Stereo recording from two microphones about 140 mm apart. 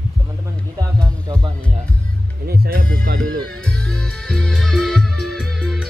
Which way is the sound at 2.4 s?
90° right.